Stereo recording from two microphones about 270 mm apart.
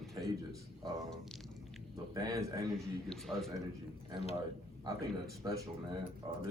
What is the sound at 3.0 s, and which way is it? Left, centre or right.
Speech, centre.